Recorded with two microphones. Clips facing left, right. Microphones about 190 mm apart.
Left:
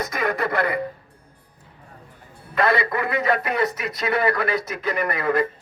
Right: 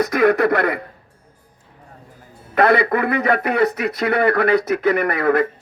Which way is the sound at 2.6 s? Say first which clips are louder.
Right 6 dB; 60° right (ahead or behind).